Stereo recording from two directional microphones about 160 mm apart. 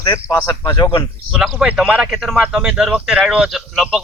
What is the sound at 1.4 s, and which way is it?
A man's voice, 5° right (ahead or behind).